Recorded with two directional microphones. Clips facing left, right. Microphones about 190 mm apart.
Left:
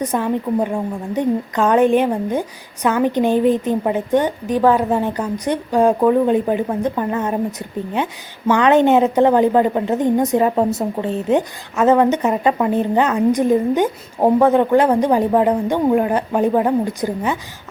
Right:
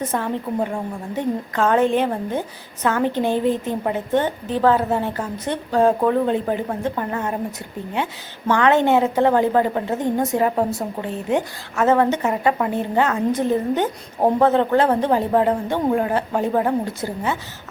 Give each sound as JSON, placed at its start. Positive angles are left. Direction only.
{"t": 0.0, "sound": "a woman's voice", "side_deg": 15}